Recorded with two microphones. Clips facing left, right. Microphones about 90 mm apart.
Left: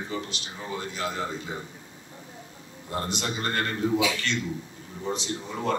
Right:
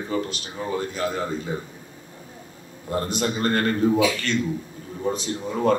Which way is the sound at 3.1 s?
45° right (ahead or behind).